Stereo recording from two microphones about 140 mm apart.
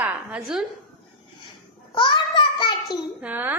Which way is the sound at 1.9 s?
35° left (ahead or behind).